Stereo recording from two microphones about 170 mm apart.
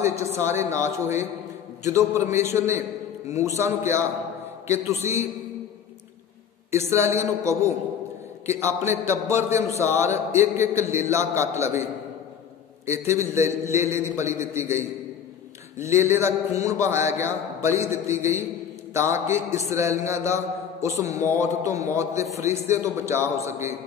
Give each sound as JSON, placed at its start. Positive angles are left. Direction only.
{"t": 0.0, "sound": "a man's voice", "side_deg": -15}
{"t": 6.7, "sound": "a man's voice", "side_deg": -15}
{"t": 12.8, "sound": "a man's voice", "side_deg": -15}
{"t": 15.8, "sound": "a man's voice", "side_deg": -15}